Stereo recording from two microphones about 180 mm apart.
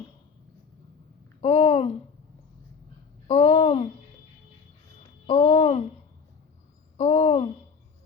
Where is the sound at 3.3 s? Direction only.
45° left (ahead or behind).